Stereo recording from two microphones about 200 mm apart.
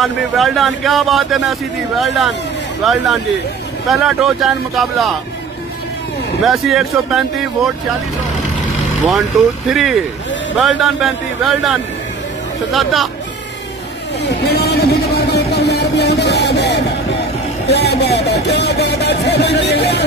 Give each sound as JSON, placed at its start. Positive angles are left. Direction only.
{"t": 0.0, "sound": "speech", "side_deg": 0}
{"t": 6.4, "sound": "speech", "side_deg": 0}
{"t": 9.7, "sound": "speech", "side_deg": 0}
{"t": 14.4, "sound": "a sound", "side_deg": 50}
{"t": 17.6, "sound": "speech", "side_deg": 55}